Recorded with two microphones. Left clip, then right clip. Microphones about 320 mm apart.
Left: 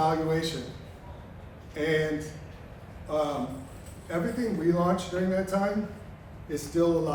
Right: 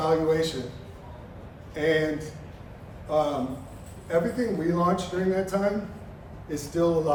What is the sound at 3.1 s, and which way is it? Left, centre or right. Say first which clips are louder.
A man's voice: right 4 dB; centre.